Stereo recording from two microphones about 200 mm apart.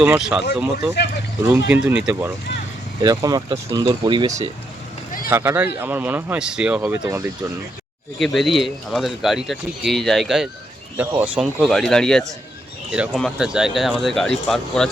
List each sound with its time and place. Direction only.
0.0 s speech: 5° right (ahead or behind)
1.5 s speech: 10° right (ahead or behind)
3.0 s speech: 20° right (ahead or behind)
8.2 s speech: centre (ahead or behind)